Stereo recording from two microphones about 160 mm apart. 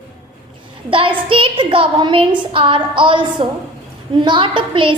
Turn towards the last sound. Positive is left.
turn(degrees=-30)  # may be behind; listen again after turning